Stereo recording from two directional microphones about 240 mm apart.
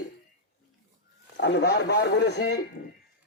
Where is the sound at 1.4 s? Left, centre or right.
Left.